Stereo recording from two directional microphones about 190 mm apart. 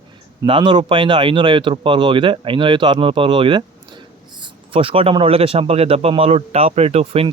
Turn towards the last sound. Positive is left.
turn(degrees=-30)  # may be behind; listen again after turning